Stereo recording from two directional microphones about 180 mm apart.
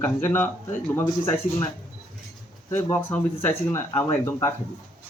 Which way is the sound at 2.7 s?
15° left (ahead or behind).